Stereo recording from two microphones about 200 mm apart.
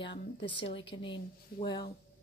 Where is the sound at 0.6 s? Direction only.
25° left (ahead or behind).